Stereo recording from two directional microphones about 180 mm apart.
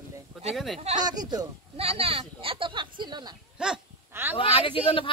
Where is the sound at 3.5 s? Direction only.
5° right (ahead or behind).